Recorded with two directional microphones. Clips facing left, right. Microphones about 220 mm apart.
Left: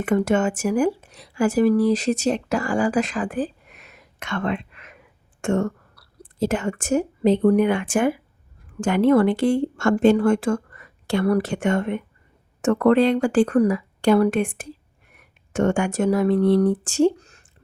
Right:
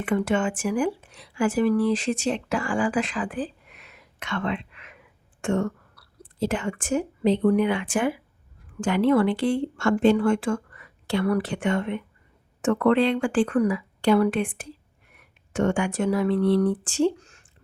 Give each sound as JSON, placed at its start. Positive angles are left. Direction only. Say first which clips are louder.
{"t": 0.0, "sound": "speech", "louder": "left 4 dB", "side_deg": 45}